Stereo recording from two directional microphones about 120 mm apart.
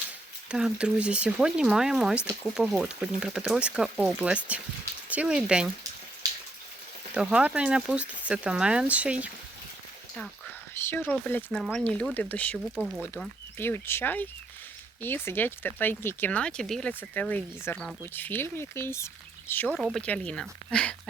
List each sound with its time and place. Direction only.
0.4 s speech: 5° right (ahead or behind)
7.1 s speech: 10° right (ahead or behind)
10.8 s speech: 20° left (ahead or behind)
12.6 s speech: 5° right (ahead or behind)
13.6 s speech: 20° left (ahead or behind)
19.8 s speech: centre (ahead or behind)